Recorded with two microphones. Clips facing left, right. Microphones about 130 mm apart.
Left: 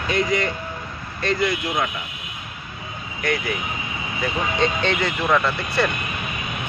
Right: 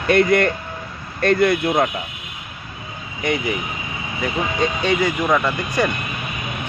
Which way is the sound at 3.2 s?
20° right (ahead or behind).